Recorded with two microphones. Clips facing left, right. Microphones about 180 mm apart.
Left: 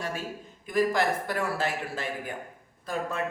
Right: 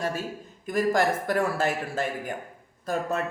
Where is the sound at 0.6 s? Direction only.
45° right (ahead or behind).